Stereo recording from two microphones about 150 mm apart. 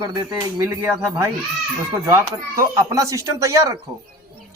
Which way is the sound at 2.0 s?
20° right (ahead or behind).